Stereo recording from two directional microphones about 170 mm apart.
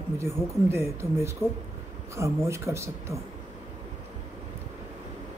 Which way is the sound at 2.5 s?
15° right (ahead or behind).